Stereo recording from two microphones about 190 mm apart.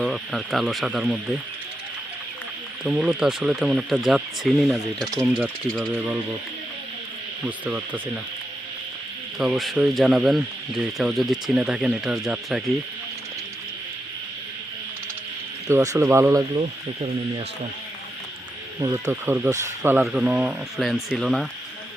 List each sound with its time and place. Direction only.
0.0 s speech: centre (ahead or behind)
2.8 s speech: 5° right (ahead or behind)
7.4 s speech: 10° right (ahead or behind)
9.4 s speech: centre (ahead or behind)
15.6 s speech: 15° right (ahead or behind)
16.6 s speech: 30° right (ahead or behind)
18.8 s speech: 15° right (ahead or behind)